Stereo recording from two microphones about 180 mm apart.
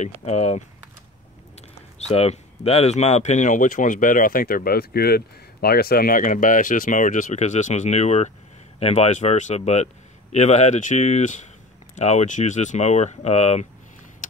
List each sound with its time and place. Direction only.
0.2 s speech: 35° left (ahead or behind)
2.0 s speech: 35° left (ahead or behind)